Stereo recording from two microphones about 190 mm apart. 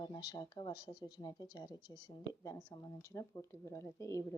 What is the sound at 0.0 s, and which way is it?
Speech, 20° left (ahead or behind).